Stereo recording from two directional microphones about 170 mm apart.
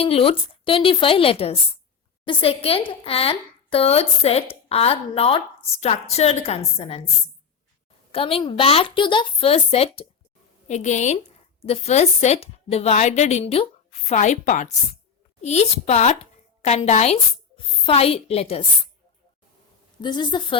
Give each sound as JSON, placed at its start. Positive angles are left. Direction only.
{"t": 0.0, "sound": "speech", "side_deg": 35}
{"t": 8.1, "sound": "a woman's voice", "side_deg": 35}
{"t": 14.1, "sound": "a woman's voice", "side_deg": 45}
{"t": 20.0, "sound": "a woman's voice", "side_deg": 25}